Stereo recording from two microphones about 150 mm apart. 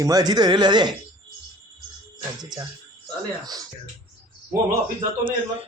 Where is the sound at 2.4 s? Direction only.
25° right (ahead or behind).